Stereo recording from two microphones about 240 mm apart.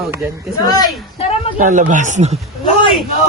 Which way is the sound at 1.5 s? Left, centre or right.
Right.